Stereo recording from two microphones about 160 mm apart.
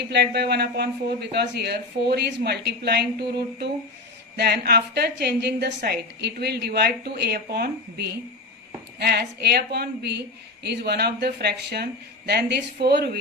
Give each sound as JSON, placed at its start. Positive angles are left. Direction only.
{"t": 0.1, "sound": "a woman's voice", "side_deg": -90}
{"t": 9.0, "sound": "a woman's voice", "side_deg": -90}